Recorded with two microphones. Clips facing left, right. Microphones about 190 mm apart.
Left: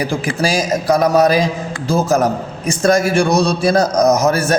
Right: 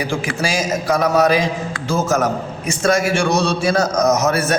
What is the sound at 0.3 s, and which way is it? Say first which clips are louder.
A man's voice: left 5 dB; 35° left (ahead or behind).